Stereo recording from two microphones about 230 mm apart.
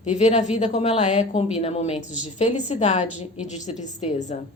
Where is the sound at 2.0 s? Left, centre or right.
Centre.